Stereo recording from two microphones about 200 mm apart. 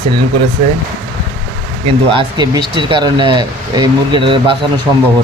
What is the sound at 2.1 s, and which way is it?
Speech, 20° right (ahead or behind).